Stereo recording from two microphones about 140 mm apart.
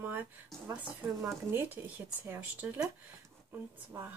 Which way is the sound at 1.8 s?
15° right (ahead or behind).